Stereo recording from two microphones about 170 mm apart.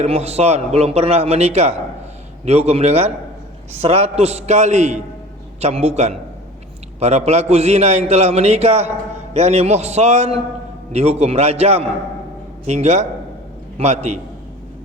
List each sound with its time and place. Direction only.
0.0 s a man's voice: 40° right (ahead or behind)